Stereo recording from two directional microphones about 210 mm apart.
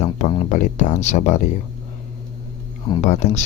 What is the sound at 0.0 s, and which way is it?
Speech, 35° left (ahead or behind).